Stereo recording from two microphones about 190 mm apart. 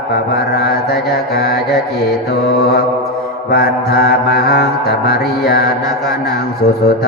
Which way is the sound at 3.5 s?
55° left (ahead or behind).